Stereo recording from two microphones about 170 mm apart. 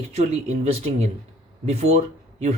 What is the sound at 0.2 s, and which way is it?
Speech, 40° right (ahead or behind).